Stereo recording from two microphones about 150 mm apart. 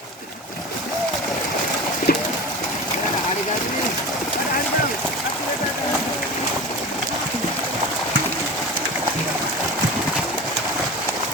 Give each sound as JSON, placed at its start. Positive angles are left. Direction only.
{"t": 2.1, "sound": "pigeon", "side_deg": 90}